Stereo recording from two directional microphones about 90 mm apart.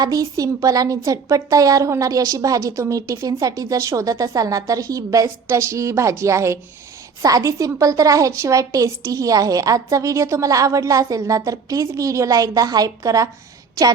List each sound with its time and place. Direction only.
0.0 s a woman's voice: 40° right (ahead or behind)